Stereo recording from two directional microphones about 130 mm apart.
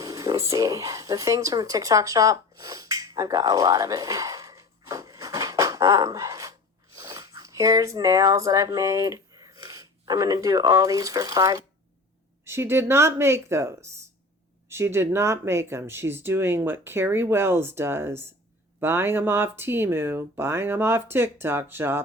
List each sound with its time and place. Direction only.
0.0 s speech: 25° right (ahead or behind)